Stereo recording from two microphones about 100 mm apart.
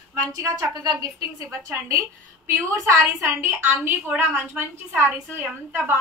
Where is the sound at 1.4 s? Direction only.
25° right (ahead or behind).